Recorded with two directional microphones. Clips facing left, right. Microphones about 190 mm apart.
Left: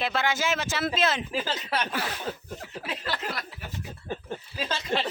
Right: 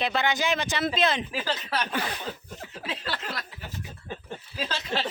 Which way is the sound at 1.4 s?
25° left (ahead or behind).